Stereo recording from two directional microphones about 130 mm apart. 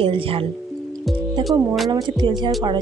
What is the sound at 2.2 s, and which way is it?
Speech, 35° right (ahead or behind).